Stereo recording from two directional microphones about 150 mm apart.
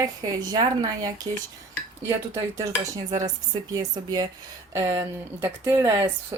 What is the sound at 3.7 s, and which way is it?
Speech, 25° right (ahead or behind).